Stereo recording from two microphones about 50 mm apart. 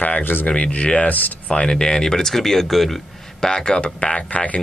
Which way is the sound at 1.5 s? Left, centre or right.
Centre.